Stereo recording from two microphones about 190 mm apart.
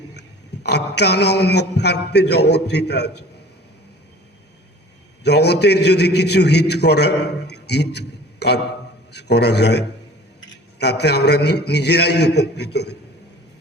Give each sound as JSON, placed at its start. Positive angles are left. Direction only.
{"t": 0.2, "sound": "a man's voice", "side_deg": 60}
{"t": 5.2, "sound": "a man's voice", "side_deg": 60}